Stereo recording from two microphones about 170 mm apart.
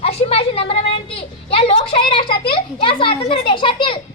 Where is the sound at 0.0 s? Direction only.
35° left (ahead or behind).